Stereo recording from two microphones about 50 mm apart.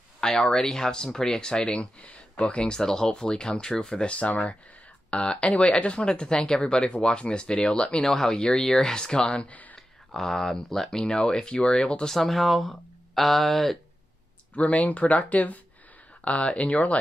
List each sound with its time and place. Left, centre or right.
0.2 s speech: centre
1.8 s speech: left
8.0 s speech: centre
10.1 s speech: centre
12.1 s speech: centre
14.5 s speech: left